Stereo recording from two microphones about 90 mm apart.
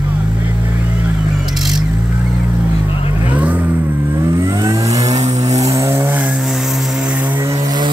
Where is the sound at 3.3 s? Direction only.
15° right (ahead or behind).